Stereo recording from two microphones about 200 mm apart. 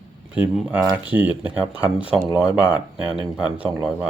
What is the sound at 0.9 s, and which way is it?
Speech, 10° right (ahead or behind).